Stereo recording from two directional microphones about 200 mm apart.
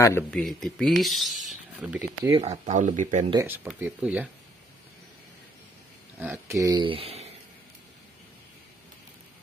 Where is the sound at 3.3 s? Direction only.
15° right (ahead or behind).